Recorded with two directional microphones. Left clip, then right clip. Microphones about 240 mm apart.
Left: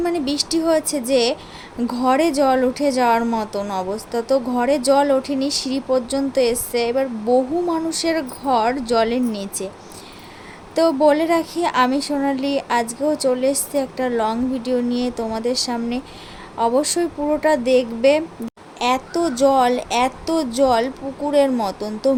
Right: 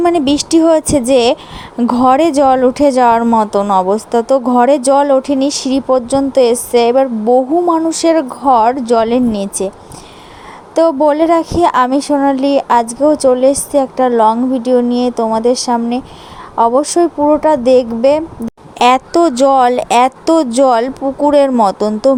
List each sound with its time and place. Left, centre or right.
0.0 s speech: right
10.8 s speech: right
18.8 s speech: right